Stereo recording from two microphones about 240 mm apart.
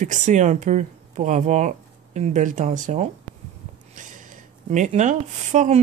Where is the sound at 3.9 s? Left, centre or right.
Right.